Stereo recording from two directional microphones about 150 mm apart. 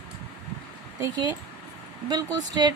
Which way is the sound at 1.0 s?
30° right (ahead or behind).